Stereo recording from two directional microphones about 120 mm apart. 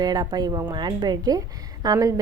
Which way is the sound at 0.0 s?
35° right (ahead or behind).